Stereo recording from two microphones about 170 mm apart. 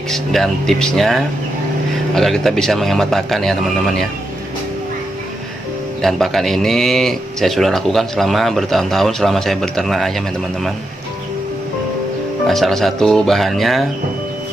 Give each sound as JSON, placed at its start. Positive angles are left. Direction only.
{"t": 0.1, "sound": "speech", "side_deg": 0}
{"t": 6.0, "sound": "speech", "side_deg": 0}
{"t": 12.5, "sound": "speech", "side_deg": 0}